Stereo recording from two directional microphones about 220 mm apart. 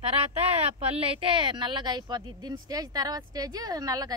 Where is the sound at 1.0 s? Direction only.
25° right (ahead or behind).